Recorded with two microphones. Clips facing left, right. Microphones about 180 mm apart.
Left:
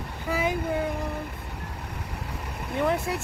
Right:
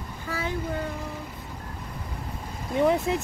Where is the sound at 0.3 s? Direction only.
15° left (ahead or behind).